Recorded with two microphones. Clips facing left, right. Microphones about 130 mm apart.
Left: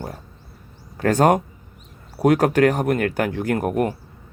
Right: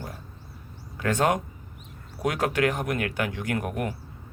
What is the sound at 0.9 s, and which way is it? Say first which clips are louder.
Speech: left 7 dB; 40° left (ahead or behind).